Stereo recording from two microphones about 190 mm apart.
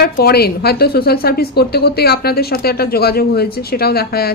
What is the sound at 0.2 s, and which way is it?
A woman's voice, 55° left (ahead or behind).